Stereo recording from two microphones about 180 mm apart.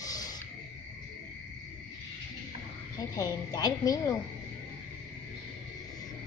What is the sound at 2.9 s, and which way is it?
A woman's voice, 20° left (ahead or behind).